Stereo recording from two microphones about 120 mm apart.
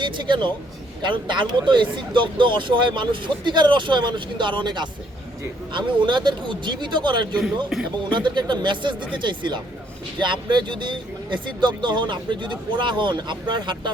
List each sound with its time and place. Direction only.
0.3 s speech: 40° right (ahead or behind)